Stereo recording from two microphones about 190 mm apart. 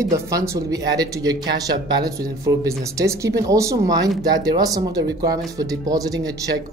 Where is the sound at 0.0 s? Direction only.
15° right (ahead or behind).